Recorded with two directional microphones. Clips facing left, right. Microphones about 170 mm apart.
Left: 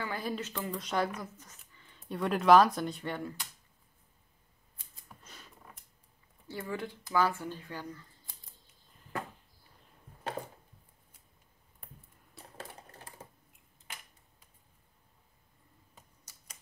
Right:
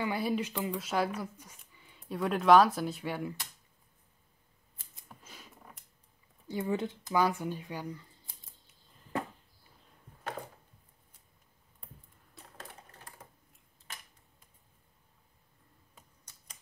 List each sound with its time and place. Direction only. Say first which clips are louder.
0.0 s speech: right 5 dB; 10° right (ahead or behind)
5.0 s a sound: right 1 dB; 5° right (ahead or behind)
6.4 s speech: right 5 dB; 20° right (ahead or behind)
16.3 s typing: even; 10° left (ahead or behind)